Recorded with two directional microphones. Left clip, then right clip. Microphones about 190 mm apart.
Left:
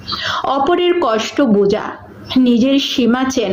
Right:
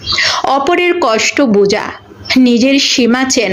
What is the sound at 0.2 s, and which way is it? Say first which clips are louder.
A woman's voice: right 4 dB; 15° right (ahead or behind).